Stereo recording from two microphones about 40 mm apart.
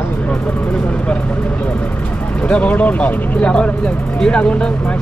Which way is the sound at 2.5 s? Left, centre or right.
Left.